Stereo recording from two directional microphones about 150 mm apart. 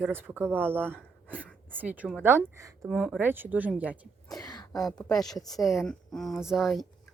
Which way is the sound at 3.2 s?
10° right (ahead or behind).